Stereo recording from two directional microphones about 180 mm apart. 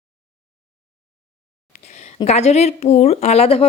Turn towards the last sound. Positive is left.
turn(degrees=35)  # may be behind; listen again after turning